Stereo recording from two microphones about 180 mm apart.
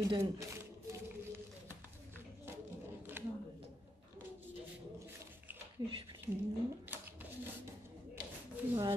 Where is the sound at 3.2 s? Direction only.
10° right (ahead or behind).